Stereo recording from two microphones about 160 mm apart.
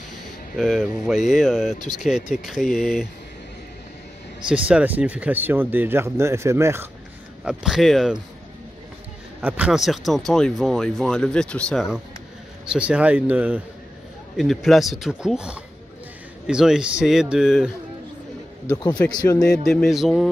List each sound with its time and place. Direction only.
0.2 s speech: centre (ahead or behind)
4.5 s speech: 5° right (ahead or behind)
7.4 s speech: 5° right (ahead or behind)
9.4 s speech: 10° right (ahead or behind)
19.1 s a man's voice: 25° left (ahead or behind)
19.6 s speech: 5° left (ahead or behind)